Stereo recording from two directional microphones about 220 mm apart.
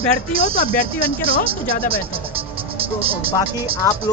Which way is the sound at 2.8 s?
25° right (ahead or behind).